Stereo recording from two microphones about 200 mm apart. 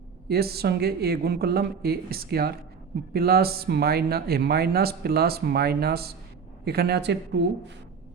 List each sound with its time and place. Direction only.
0.3 s speech: 50° right (ahead or behind)